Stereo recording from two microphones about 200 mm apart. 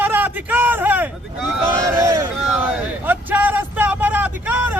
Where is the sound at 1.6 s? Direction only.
15° right (ahead or behind).